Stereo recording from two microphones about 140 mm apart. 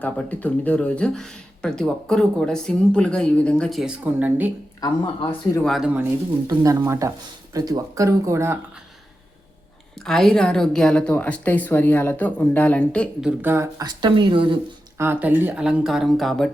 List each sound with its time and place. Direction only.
0.0 s speech: 10° left (ahead or behind); by 4.5 s 10° right (ahead or behind)
4.8 s speech: 30° left (ahead or behind)
5.6 s speech: centre (ahead or behind)
5.9 s speech: 15° right (ahead or behind)
6.5 s speech: 25° right (ahead or behind)
10.0 s speech: 5° left (ahead or behind)
13.4 s speech: 20° right (ahead or behind); by 14.6 s 35° right (ahead or behind)
14.9 s speech: 15° right (ahead or behind); by 16.5 s centre (ahead or behind)